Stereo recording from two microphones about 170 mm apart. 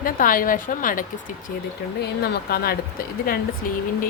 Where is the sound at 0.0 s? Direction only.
55° left (ahead or behind).